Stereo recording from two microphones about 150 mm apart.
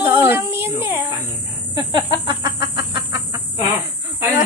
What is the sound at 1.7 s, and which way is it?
Speech, 30° right (ahead or behind).